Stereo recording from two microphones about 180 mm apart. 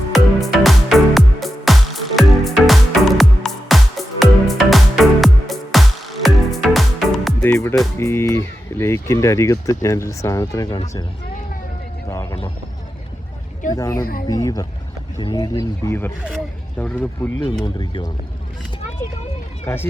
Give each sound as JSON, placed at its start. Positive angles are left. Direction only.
{"t": 0.1, "sound": "music", "side_deg": 0}
{"t": 7.4, "sound": "music", "side_deg": 15}
{"t": 7.9, "sound": "speech", "side_deg": 15}
{"t": 12.0, "sound": "music", "side_deg": 20}
{"t": 13.7, "sound": "speech", "side_deg": 20}
{"t": 14.0, "sound": "speech", "side_deg": 55}
{"t": 14.3, "sound": "speech", "side_deg": 20}
{"t": 17.4, "sound": "speech", "side_deg": 25}
{"t": 19.6, "sound": "speech", "side_deg": 15}